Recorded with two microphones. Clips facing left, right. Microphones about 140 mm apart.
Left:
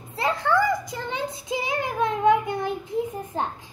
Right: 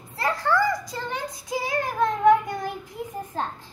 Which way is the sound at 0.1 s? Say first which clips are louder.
Left 1 dB; 20° left (ahead or behind).